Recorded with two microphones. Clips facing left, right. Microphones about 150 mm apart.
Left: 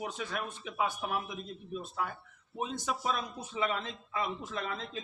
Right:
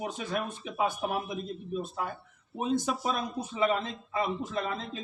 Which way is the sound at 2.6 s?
45° right (ahead or behind).